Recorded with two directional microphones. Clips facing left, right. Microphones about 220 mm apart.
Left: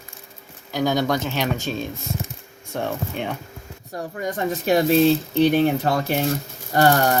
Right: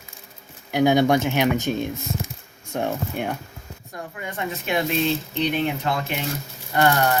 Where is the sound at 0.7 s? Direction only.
60° right (ahead or behind).